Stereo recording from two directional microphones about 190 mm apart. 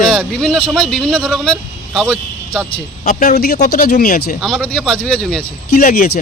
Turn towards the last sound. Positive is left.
turn(degrees=50)  # may be behind; listen again after turning